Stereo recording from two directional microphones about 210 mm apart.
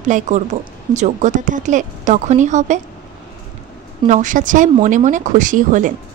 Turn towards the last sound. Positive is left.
turn(degrees=-35)  # may be behind; listen again after turning